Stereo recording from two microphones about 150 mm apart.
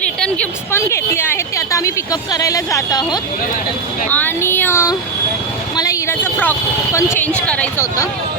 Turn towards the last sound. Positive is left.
turn(degrees=10)  # may be behind; listen again after turning